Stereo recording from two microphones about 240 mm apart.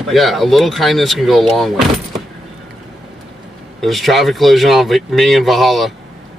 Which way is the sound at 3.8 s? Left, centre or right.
Centre.